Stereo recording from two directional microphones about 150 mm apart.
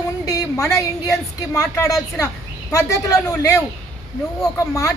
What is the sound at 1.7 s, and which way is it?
A woman's voice, 20° left (ahead or behind).